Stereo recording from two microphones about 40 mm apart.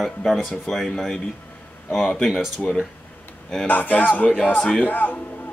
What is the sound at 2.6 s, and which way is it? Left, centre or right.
Speech, centre.